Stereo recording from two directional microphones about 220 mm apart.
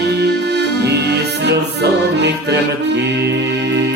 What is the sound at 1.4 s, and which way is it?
Music, 50° right (ahead or behind).